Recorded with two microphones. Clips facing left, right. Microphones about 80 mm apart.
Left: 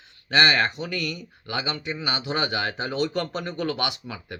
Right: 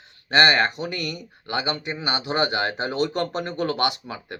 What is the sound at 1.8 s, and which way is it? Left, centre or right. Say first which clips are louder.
Speech: right 1 dB; right.